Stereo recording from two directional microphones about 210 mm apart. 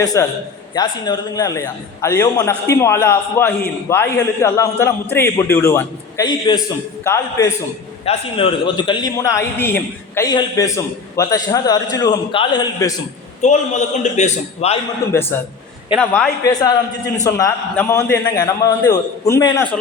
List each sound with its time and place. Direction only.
0.0 s a man's voice: 15° left (ahead or behind)
8.0 s a man's voice: 25° left (ahead or behind)
13.4 s a man's voice: 35° left (ahead or behind)
15.1 s a man's voice: 10° left (ahead or behind)
16.4 s a man's voice: 15° left (ahead or behind)